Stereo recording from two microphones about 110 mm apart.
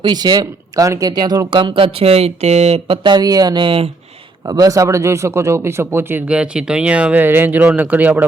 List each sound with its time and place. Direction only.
0.0 s speech: 40° right (ahead or behind)
1.5 s speech: 50° right (ahead or behind)
4.4 s speech: 35° right (ahead or behind); by 8.3 s 15° right (ahead or behind)